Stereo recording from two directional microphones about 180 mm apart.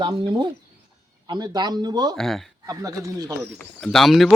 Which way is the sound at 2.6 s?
20° right (ahead or behind).